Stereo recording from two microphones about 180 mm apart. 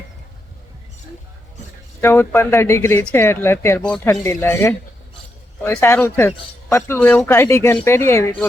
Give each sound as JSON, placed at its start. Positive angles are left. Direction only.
{"t": 2.0, "sound": "speech", "side_deg": 15}
{"t": 4.1, "sound": "speech", "side_deg": 15}